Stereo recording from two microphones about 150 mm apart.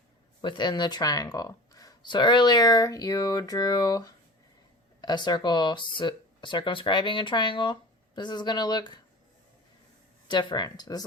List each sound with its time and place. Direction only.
0.4 s speech: 30° left (ahead or behind)
10.2 s speech: 30° left (ahead or behind)